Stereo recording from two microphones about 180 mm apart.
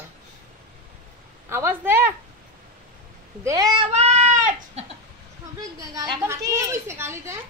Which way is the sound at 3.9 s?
40° right (ahead or behind).